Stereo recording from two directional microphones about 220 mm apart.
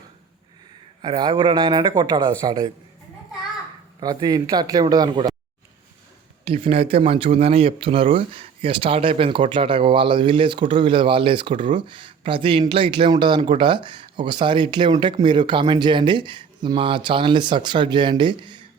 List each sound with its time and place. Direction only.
1.0 s speech: 20° right (ahead or behind)
4.0 s speech: 15° right (ahead or behind)
6.4 s speech: 25° right (ahead or behind)